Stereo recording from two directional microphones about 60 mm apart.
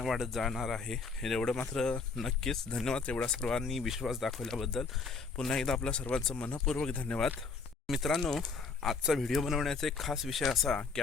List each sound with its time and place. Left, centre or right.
0.0 s speech: centre
3.4 s speech: centre
6.9 s speech: left
7.9 s speech: centre